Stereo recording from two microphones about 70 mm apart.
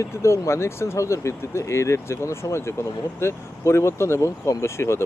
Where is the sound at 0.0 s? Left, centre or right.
Left.